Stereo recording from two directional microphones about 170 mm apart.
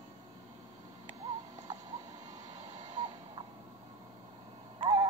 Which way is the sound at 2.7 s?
35° right (ahead or behind).